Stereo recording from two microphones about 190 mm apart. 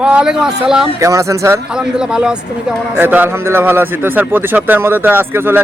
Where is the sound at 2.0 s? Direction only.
5° right (ahead or behind).